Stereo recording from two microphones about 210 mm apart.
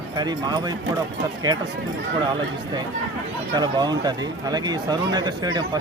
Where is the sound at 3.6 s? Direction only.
20° right (ahead or behind).